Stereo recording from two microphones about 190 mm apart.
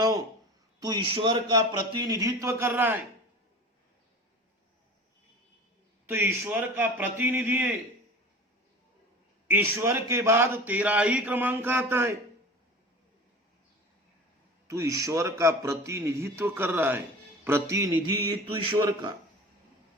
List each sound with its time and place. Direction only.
0.8 s a man's voice: 20° right (ahead or behind)
6.1 s a man's voice: 10° right (ahead or behind)
9.5 s a man's voice: 10° right (ahead or behind)
14.7 s a man's voice: 15° right (ahead or behind)